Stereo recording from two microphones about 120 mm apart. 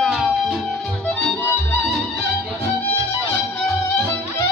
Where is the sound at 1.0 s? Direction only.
15° left (ahead or behind).